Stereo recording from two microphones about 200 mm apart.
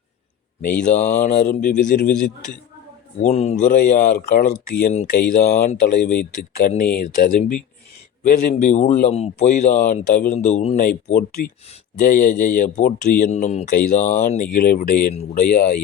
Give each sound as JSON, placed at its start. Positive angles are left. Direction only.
{"t": 0.6, "sound": "speech", "side_deg": 35}
{"t": 5.0, "sound": "speech", "side_deg": 45}
{"t": 6.6, "sound": "speech", "side_deg": 45}
{"t": 15.1, "sound": "speech", "side_deg": 35}